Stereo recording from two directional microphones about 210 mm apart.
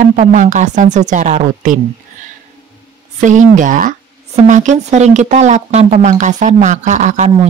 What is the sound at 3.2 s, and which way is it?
A woman's voice, 35° right (ahead or behind).